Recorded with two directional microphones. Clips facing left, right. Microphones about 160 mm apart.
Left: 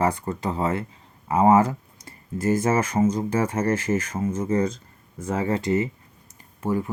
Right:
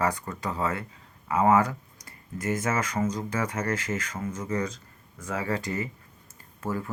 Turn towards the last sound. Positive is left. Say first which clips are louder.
# left 6 dB
turn(degrees=20)  # may be behind; listen again after turning